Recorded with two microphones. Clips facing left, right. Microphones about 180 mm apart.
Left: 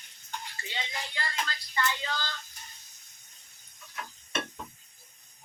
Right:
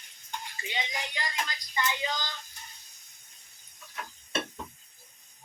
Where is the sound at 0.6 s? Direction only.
15° right (ahead or behind).